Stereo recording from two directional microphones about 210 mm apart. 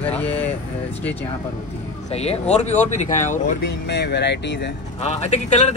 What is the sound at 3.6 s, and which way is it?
Speech, 55° left (ahead or behind).